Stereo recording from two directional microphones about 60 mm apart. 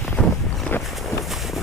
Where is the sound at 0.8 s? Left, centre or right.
Centre.